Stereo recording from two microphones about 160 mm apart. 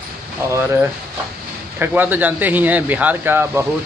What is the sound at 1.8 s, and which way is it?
A man's voice, 10° right (ahead or behind).